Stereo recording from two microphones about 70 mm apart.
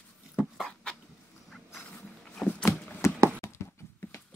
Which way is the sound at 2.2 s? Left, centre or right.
Centre.